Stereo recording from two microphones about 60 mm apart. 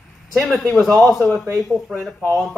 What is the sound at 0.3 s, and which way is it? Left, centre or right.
A man's voice, centre.